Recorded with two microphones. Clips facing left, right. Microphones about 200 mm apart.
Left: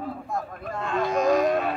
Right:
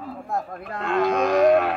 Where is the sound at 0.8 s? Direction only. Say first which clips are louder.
Right 4 dB; 65° right (ahead or behind).